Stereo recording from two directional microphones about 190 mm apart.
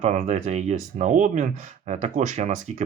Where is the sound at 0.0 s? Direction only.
40° right (ahead or behind).